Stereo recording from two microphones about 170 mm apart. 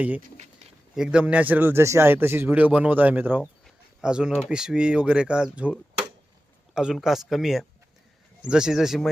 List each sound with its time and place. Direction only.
0.2 s speech: 45° right (ahead or behind)
0.9 s a man's voice: 5° right (ahead or behind)
6.7 s speech: 5° right (ahead or behind)